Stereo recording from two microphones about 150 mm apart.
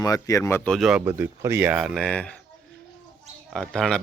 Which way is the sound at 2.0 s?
5° left (ahead or behind).